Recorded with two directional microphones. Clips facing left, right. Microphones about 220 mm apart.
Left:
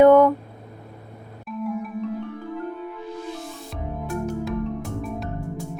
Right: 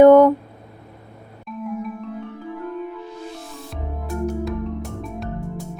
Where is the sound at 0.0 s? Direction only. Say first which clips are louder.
Right 3 dB; 40° right (ahead or behind).